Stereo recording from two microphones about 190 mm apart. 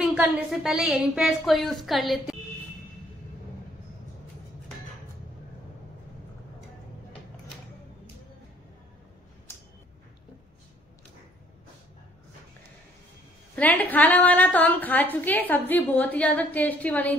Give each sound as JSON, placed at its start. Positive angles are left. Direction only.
{"t": 0.0, "sound": "a woman's voice", "side_deg": -5}
{"t": 13.6, "sound": "a woman's voice", "side_deg": 10}